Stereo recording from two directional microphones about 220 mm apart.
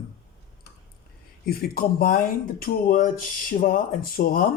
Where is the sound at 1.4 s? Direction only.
45° left (ahead or behind).